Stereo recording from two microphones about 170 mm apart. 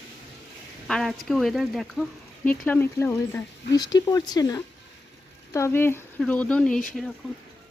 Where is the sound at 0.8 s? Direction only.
Centre (ahead or behind).